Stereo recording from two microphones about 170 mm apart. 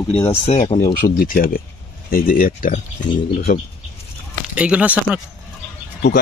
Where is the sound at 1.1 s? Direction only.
55° left (ahead or behind).